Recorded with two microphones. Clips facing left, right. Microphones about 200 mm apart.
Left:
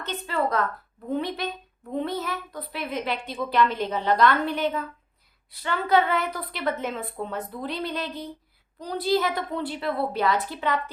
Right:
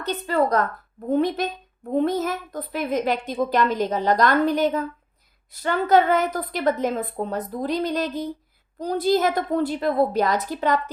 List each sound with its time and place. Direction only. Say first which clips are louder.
0.0 s a woman's voice: right 5 dB; 40° right (ahead or behind)